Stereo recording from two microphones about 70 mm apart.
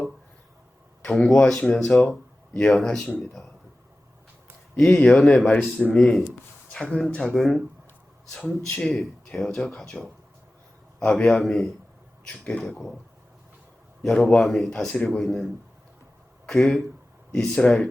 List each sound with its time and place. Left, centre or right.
1.1 s speech: centre
4.8 s speech: centre
5.5 s speech: left
6.0 s speech: centre
11.0 s speech: centre
12.2 s speech: centre
14.0 s speech: centre
16.5 s speech: centre
17.3 s speech: centre